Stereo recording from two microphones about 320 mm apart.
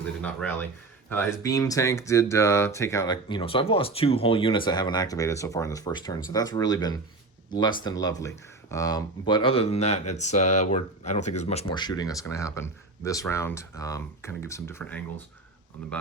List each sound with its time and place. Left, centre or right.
0.2 s speech: centre